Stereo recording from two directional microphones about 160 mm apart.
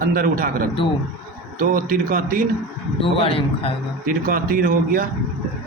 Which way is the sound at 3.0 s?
35° left (ahead or behind).